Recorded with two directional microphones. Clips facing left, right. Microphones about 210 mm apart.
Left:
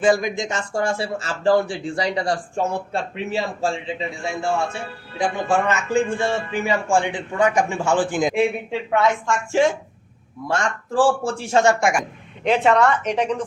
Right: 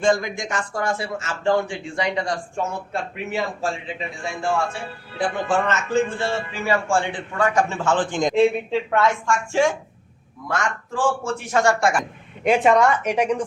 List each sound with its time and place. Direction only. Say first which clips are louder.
0.0 s speech: left 2 dB; 15° left (ahead or behind)
5.1 s speech: left 1 dB; 10° left (ahead or behind)
8.9 s speech: left 3 dB; 20° left (ahead or behind)
10.5 s speech: left 3 dB; 30° left (ahead or behind); by 12.0 s 15° left (ahead or behind)
12.5 s a woman's voice: right 1 dB; 10° right (ahead or behind)